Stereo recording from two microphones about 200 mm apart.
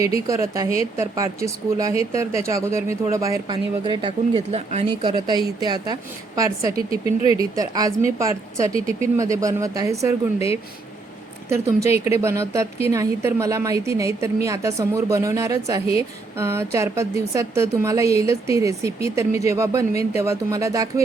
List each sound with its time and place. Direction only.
0.0 s a woman's voice: 15° right (ahead or behind); by 4.9 s 30° right (ahead or behind)
5.0 s a woman's voice: 20° right (ahead or behind)